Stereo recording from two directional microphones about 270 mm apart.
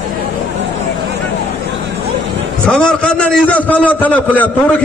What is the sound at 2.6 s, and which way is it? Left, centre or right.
A man's voice, centre.